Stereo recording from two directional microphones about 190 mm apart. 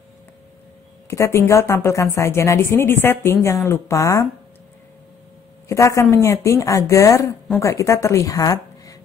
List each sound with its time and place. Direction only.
1.0 s a woman's voice: 15° left (ahead or behind)
5.7 s a woman's voice: 15° left (ahead or behind)